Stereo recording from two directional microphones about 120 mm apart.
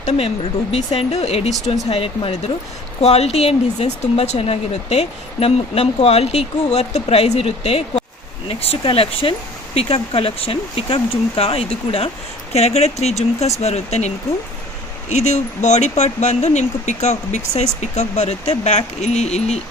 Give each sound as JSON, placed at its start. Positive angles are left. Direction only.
{"t": 0.7, "sound": "speech", "side_deg": 60}
{"t": 15.1, "sound": "speech", "side_deg": 75}